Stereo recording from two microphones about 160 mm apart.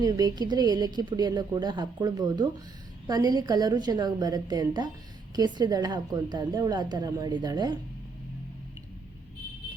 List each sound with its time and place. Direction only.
0.0 s a woman's voice: 25° right (ahead or behind)